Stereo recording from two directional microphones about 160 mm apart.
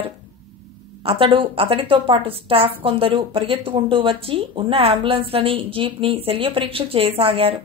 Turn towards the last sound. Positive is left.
turn(degrees=-35)  # may be behind; listen again after turning